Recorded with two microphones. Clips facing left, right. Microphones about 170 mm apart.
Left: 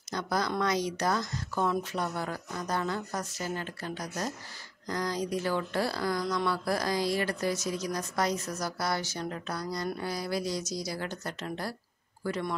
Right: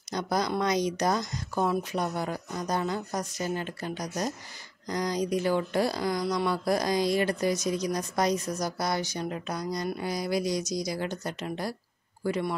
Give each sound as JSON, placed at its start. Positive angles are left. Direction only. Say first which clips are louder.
{"t": 0.1, "sound": "a man's voice", "louder": "right 2 dB", "side_deg": -15}